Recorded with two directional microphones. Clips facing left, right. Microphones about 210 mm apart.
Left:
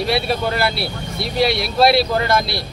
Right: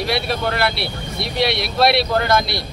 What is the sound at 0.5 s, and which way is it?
Speech, centre (ahead or behind).